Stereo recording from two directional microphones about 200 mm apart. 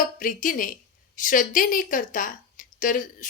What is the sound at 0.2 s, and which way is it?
A woman's voice, 40° left (ahead or behind).